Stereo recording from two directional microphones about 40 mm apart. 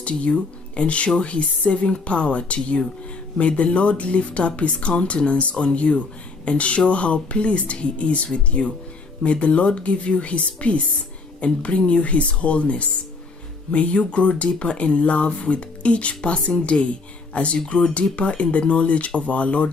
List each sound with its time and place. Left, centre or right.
0.0 s speech: left